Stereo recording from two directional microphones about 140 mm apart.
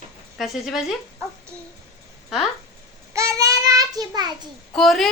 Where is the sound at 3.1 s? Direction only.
25° right (ahead or behind).